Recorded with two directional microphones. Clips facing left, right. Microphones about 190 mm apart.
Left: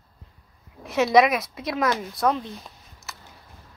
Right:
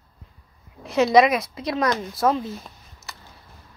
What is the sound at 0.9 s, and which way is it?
Speech, centre (ahead or behind).